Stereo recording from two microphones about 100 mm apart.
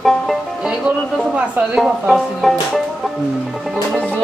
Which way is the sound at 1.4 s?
10° right (ahead or behind).